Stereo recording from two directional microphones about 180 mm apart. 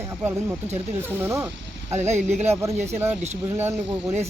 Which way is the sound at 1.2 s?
15° right (ahead or behind).